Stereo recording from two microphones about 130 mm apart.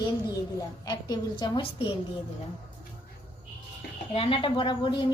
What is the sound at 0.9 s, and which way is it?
Speech, 30° left (ahead or behind).